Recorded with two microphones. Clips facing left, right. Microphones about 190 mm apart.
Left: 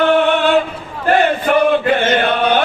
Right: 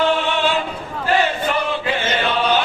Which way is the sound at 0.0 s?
55° left (ahead or behind).